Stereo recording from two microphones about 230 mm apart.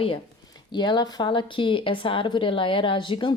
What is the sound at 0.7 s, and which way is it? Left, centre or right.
Speech, centre.